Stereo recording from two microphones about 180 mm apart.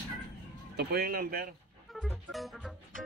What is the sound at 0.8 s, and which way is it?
Speech, 60° right (ahead or behind).